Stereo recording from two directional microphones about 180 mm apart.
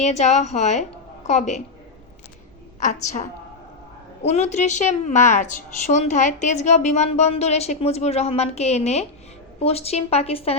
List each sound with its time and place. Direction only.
0.0 s a woman's voice: 40° left (ahead or behind)
2.8 s a woman's voice: 40° left (ahead or behind)